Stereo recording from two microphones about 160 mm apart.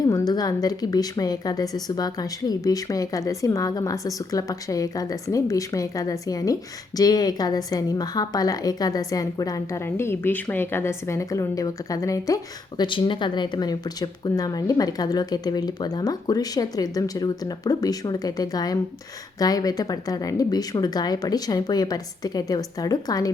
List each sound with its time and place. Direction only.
0.0 s a woman's voice: 20° left (ahead or behind)